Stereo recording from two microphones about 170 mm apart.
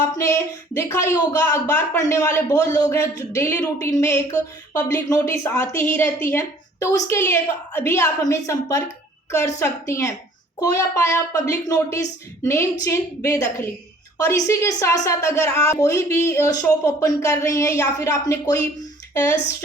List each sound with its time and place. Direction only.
0.2 s speech: 15° left (ahead or behind)